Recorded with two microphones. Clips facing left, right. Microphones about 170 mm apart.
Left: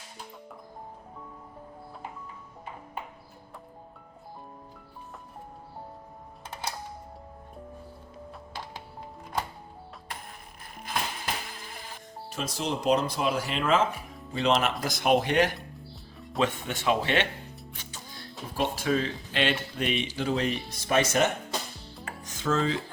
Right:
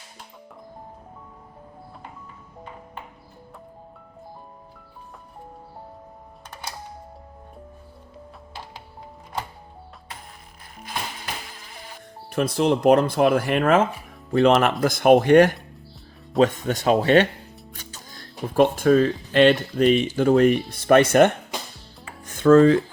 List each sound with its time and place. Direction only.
12.3 s speech: 60° right (ahead or behind); by 17.2 s 40° right (ahead or behind)
17.7 s music: 40° right (ahead or behind)
18.5 s speech: 55° right (ahead or behind)
22.2 s music: 55° right (ahead or behind)